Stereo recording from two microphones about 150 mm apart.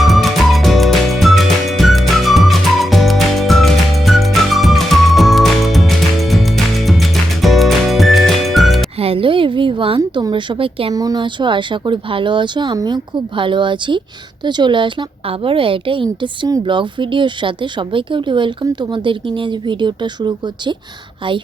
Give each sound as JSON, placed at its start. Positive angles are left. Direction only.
{"t": 0.0, "sound": "music", "side_deg": 0}
{"t": 9.0, "sound": "a sound", "side_deg": -40}
{"t": 10.2, "sound": "a woman's voice", "side_deg": -30}
{"t": 10.9, "sound": "a woman's voice", "side_deg": -25}